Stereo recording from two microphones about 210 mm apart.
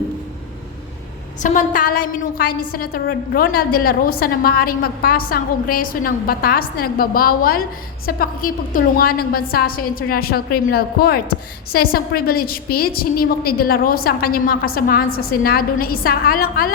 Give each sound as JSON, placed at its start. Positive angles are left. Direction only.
{"t": 1.4, "sound": "a woman's voice", "side_deg": 35}